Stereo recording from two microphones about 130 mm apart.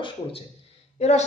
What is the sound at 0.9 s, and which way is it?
Speech, 60° left (ahead or behind).